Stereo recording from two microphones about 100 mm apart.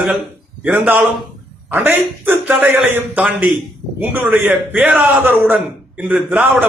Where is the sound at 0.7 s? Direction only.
20° right (ahead or behind).